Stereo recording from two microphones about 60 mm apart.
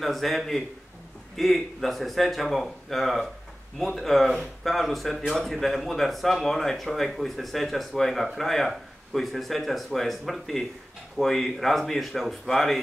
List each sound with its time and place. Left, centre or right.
0.0 s speech: centre